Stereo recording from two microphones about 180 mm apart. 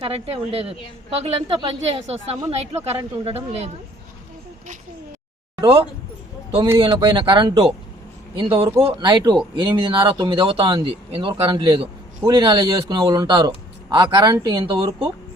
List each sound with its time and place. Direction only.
0.0 s a woman's voice: 30° right (ahead or behind)
5.5 s speech: 25° right (ahead or behind)